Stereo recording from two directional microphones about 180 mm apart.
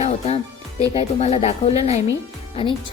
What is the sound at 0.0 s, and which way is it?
Music, 40° left (ahead or behind).